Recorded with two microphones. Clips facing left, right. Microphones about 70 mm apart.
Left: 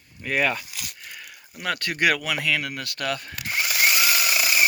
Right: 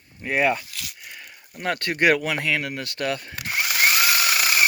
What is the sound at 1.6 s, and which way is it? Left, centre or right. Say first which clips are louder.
Speech: right 2 dB; right.